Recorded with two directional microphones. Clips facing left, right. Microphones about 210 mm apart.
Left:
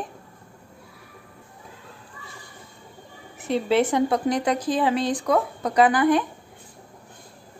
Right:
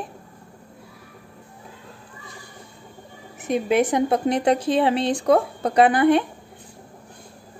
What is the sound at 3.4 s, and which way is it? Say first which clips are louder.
A woman's voice: right 1 dB; 15° right (ahead or behind).